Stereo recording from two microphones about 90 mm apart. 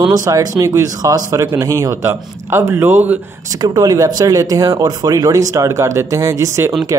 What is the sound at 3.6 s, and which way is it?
Speech, 45° right (ahead or behind).